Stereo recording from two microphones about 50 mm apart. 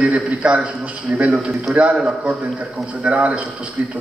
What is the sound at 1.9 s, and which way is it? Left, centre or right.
A man's voice, right.